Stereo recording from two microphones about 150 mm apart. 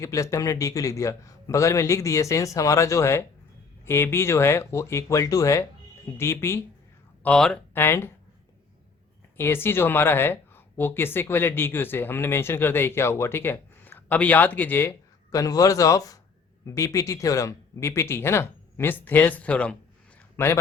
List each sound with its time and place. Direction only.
0.0 s a man's voice: 20° left (ahead or behind)
9.4 s a man's voice: 15° left (ahead or behind)